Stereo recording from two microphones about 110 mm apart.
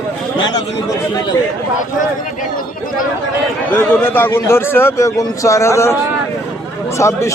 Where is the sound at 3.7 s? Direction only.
20° left (ahead or behind).